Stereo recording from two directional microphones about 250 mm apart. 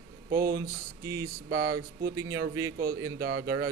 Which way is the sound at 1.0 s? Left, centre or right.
Centre.